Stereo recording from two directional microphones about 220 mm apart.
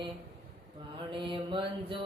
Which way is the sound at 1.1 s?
25° right (ahead or behind).